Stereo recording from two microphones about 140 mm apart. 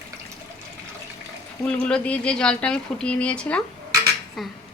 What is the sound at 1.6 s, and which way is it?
Speech, 5° left (ahead or behind).